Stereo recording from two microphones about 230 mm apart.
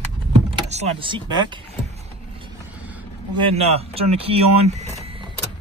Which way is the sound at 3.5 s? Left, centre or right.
Right.